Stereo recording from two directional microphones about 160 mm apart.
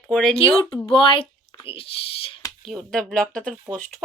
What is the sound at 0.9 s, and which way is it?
Speech, 35° left (ahead or behind).